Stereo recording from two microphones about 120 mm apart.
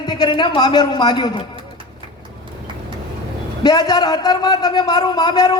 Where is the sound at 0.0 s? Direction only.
35° left (ahead or behind).